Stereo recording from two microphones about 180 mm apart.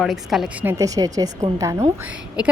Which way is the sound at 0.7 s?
20° right (ahead or behind).